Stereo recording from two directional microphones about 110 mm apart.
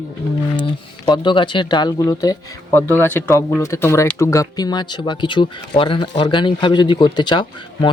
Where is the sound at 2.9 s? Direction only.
15° left (ahead or behind).